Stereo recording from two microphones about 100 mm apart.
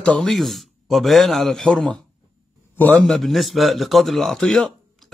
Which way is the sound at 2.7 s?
20° left (ahead or behind).